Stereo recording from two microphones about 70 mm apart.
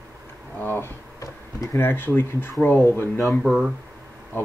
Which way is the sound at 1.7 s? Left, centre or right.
Left.